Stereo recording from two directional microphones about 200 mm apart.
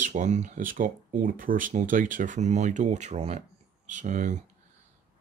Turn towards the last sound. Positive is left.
turn(degrees=-40)  # may be behind; listen again after turning